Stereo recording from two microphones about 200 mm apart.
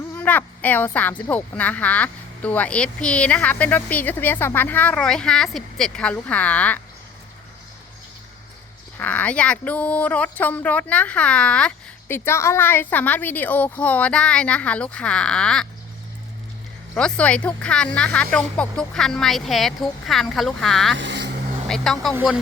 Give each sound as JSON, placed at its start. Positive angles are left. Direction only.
{"t": 0.2, "sound": "a woman's voice", "side_deg": 10}
{"t": 9.0, "sound": "speech", "side_deg": 10}
{"t": 16.9, "sound": "speech", "side_deg": 5}
{"t": 20.9, "sound": "speech", "side_deg": -65}
{"t": 21.7, "sound": "speech", "side_deg": 0}
{"t": 22.1, "sound": "speech", "side_deg": -10}